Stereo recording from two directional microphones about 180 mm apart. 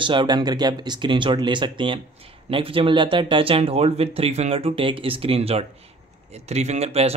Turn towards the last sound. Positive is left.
turn(degrees=-35)  # may be behind; listen again after turning